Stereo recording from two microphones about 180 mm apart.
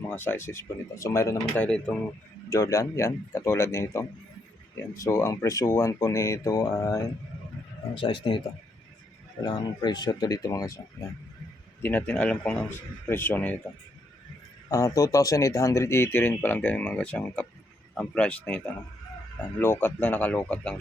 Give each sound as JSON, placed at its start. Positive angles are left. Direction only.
{"t": 0.0, "sound": "speech", "side_deg": 10}
{"t": 2.5, "sound": "speech", "side_deg": 15}
{"t": 7.9, "sound": "speech", "side_deg": 25}
{"t": 9.4, "sound": "speech", "side_deg": 25}
{"t": 14.7, "sound": "speech", "side_deg": 20}